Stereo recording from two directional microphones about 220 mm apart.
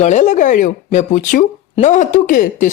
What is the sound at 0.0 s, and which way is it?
Speech, 30° left (ahead or behind).